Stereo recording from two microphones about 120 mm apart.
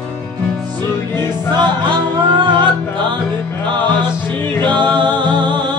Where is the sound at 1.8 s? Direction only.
40° right (ahead or behind).